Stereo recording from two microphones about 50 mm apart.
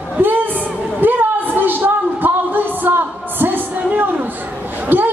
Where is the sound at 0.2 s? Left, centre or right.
Right.